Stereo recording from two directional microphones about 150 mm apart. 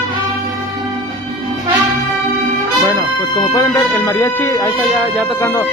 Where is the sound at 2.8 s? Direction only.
25° left (ahead or behind).